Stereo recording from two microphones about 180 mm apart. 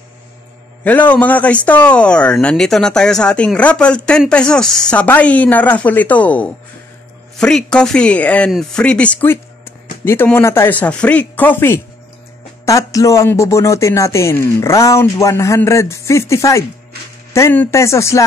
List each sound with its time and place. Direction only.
0.8 s a man's voice: 10° left (ahead or behind)